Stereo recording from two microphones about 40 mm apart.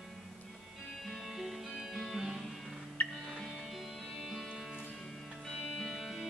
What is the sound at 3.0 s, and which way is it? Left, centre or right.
Music, left.